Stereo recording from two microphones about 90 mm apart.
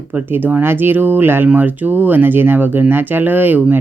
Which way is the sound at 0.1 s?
20° right (ahead or behind).